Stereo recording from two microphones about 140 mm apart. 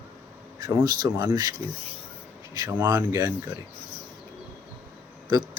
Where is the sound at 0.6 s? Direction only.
30° right (ahead or behind).